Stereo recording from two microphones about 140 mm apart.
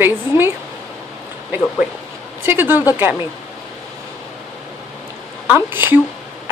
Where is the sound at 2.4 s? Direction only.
15° right (ahead or behind).